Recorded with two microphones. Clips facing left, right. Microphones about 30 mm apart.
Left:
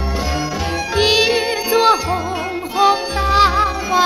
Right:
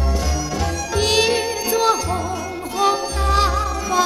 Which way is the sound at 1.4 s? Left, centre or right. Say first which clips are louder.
Left 4 dB; left.